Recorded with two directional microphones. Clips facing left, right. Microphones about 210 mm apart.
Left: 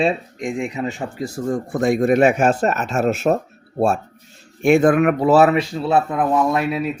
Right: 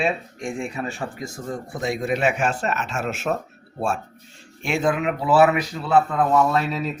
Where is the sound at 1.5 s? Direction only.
50° left (ahead or behind).